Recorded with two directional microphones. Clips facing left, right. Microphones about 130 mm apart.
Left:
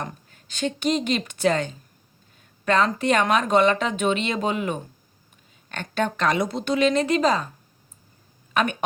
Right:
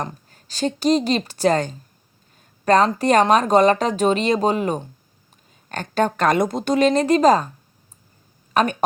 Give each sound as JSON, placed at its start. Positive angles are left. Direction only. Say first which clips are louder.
{"t": 0.0, "sound": "speech", "louder": "right 4 dB", "side_deg": -35}
{"t": 8.6, "sound": "speech", "louder": "right 4 dB", "side_deg": -40}